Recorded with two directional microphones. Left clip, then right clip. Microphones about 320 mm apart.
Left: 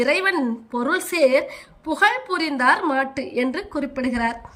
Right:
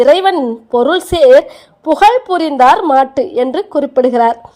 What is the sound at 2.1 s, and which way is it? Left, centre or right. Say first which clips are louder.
A woman's voice: right 11 dB; right.